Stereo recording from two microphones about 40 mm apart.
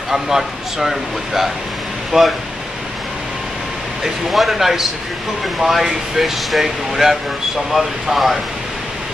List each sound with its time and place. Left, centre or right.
0.1 s speech: centre
4.0 s speech: centre